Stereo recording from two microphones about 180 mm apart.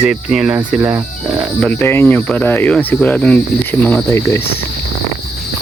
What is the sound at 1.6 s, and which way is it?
Speech, 10° left (ahead or behind).